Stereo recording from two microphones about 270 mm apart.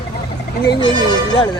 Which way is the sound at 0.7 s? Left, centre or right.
Centre.